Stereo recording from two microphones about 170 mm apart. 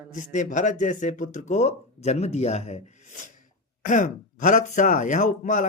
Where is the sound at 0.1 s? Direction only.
45° left (ahead or behind).